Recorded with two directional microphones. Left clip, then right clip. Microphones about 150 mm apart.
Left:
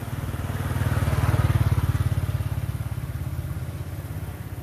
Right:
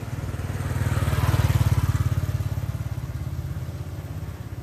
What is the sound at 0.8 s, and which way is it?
Vehicle, 30° right (ahead or behind).